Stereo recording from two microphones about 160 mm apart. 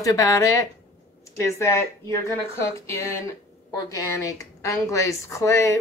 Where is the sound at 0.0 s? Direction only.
20° left (ahead or behind).